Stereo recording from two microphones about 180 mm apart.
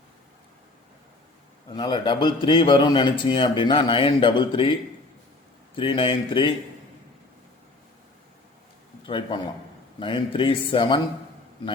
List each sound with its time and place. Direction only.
1.7 s a man's voice: 25° left (ahead or behind)
5.7 s a man's voice: 30° left (ahead or behind)
9.0 s a man's voice: 30° left (ahead or behind)